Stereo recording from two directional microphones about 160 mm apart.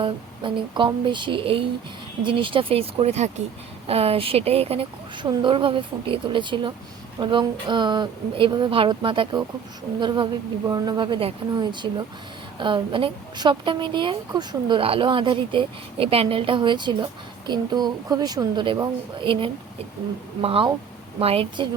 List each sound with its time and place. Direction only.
0.0 s a woman's voice: 30° right (ahead or behind)